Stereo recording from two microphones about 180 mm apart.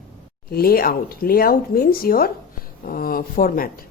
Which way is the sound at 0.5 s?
55° left (ahead or behind).